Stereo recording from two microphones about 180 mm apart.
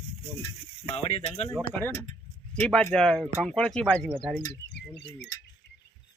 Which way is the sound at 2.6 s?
10° left (ahead or behind).